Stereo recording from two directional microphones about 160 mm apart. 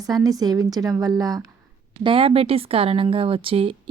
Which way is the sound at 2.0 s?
35° right (ahead or behind).